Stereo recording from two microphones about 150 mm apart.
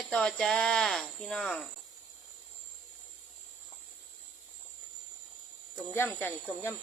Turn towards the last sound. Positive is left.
turn(degrees=15)  # may be behind; listen again after turning